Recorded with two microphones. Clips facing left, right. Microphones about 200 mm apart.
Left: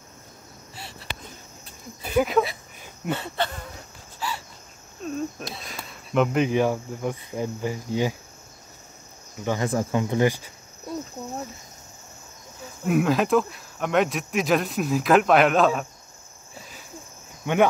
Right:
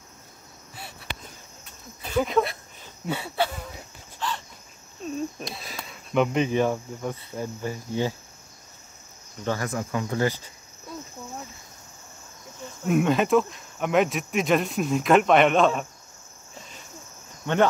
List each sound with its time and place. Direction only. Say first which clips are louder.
0.7 s a sound: left 1 dB; 60° right (ahead or behind)
2.0 s a sound: left 2 dB; 5° left (ahead or behind)
3.1 s speech: even; 10° right (ahead or behind)
4.2 s cricket: right 1 dB; 10° left (ahead or behind)
5.0 s speech: left 1 dB; centre (ahead or behind)
6.4 s speech: left 1 dB; 10° left (ahead or behind)
9.4 s speech: left 2 dB; 15° left (ahead or behind)
9.7 s speech: left 4 dB; 30° left (ahead or behind)
11.2 s speech: left 5 dB; 40° left (ahead or behind)
12.8 s speech: even; centre (ahead or behind)
17.4 s speech: left 1 dB; 10° left (ahead or behind)